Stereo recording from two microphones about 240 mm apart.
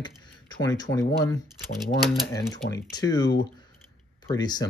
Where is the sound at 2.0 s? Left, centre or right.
Centre.